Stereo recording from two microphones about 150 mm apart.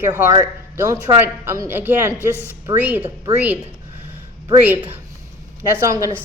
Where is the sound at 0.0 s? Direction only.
15° right (ahead or behind).